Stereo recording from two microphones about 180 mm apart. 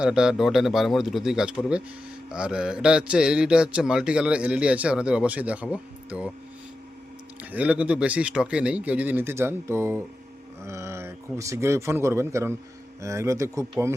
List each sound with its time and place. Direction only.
0.0 s speech: 5° right (ahead or behind)
7.5 s speech: 5° right (ahead or behind)